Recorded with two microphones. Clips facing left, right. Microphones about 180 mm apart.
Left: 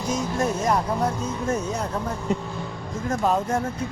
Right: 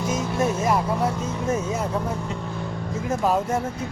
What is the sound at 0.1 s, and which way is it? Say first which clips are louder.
Music: left 1 dB; 5° right (ahead or behind).